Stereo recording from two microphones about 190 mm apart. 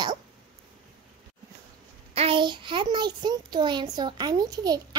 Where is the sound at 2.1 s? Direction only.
30° right (ahead or behind).